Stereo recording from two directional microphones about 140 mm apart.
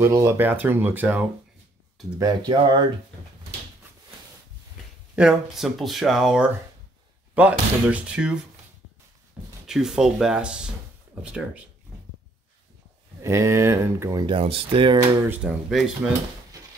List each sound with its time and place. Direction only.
0.0 s speech: 20° right (ahead or behind)
2.1 s speech: 30° right (ahead or behind)
5.1 s speech: 5° right (ahead or behind)
9.4 s a sound: 10° right (ahead or behind)
9.7 s speech: 5° right (ahead or behind)
13.2 s speech: 20° right (ahead or behind)
14.2 s speech: 40° right (ahead or behind)
15.2 s speech: 10° right (ahead or behind)